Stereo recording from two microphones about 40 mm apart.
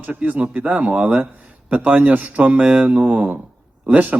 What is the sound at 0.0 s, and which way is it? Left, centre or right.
Speech, right.